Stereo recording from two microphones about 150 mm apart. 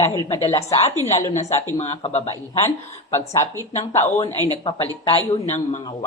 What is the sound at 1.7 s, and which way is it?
Speech, 45° left (ahead or behind).